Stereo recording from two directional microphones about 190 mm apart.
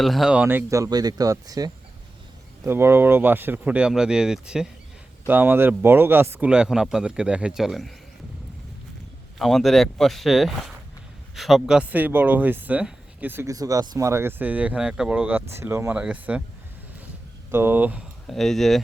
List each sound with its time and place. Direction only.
0.0 s speech: centre (ahead or behind)
9.4 s speech: centre (ahead or behind)
17.5 s speech: 10° right (ahead or behind)